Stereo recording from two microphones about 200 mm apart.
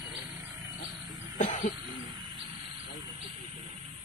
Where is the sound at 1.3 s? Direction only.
40° left (ahead or behind).